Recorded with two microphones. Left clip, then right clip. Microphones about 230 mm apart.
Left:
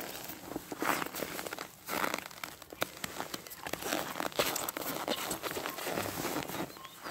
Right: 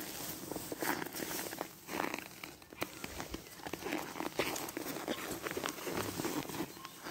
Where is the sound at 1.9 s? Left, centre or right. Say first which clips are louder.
Left 5 dB; left.